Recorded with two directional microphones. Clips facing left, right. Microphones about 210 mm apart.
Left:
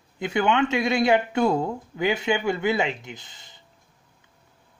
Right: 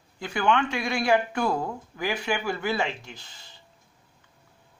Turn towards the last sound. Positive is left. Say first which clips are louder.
# left 4 dB
turn(degrees=20)  # may be behind; listen again after turning